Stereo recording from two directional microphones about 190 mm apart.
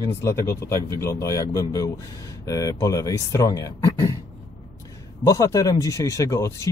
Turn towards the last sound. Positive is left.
turn(degrees=15)  # may be behind; listen again after turning